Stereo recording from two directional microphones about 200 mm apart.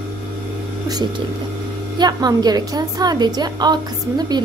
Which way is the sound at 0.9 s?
20° right (ahead or behind).